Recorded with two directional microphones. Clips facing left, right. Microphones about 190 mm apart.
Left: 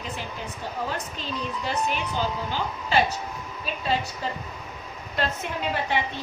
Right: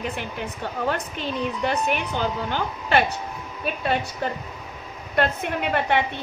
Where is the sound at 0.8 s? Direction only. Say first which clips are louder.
Right 5 dB; 60° right (ahead or behind).